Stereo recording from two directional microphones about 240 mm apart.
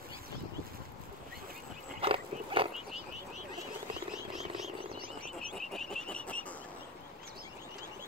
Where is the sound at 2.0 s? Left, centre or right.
Right.